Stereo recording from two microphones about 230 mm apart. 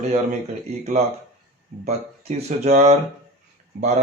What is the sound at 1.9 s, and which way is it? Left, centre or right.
A man's voice, right.